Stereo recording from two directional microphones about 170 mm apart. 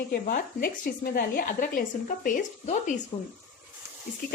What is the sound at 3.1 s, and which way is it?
Speech, 25° left (ahead or behind).